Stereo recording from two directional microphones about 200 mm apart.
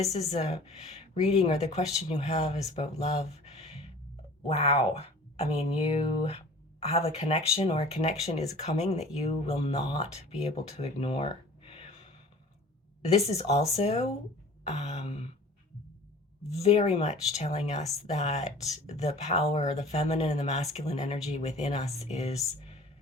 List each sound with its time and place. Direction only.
0.0 s speech: 35° left (ahead or behind)
13.1 s speech: 30° left (ahead or behind)
16.6 s speech: 30° left (ahead or behind)